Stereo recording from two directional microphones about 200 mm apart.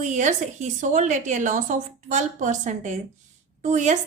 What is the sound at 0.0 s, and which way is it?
A woman's voice, 35° right (ahead or behind).